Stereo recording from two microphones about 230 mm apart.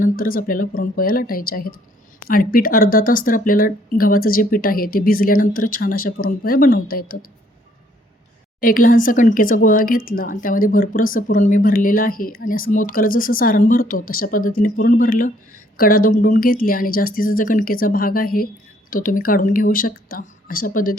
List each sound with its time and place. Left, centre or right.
0.0 s speech: left
8.6 s speech: left